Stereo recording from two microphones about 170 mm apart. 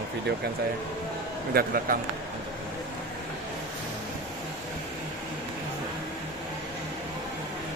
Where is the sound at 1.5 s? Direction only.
55° right (ahead or behind).